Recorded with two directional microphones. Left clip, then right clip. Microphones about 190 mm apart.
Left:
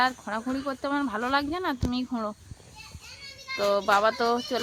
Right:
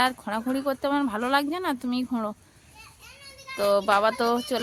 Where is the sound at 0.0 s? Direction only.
30° right (ahead or behind).